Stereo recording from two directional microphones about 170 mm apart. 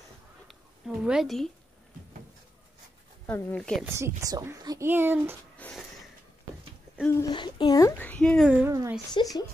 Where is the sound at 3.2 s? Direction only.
10° left (ahead or behind).